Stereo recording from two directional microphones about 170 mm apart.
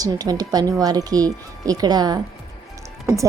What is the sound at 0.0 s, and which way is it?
A woman's voice, 20° right (ahead or behind).